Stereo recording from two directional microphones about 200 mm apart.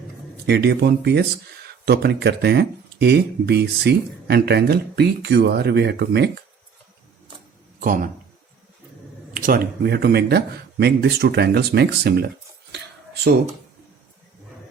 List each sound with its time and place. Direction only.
0.4 s speech: 55° right (ahead or behind)
7.8 s speech: 45° right (ahead or behind)
9.3 s speech: 45° right (ahead or behind)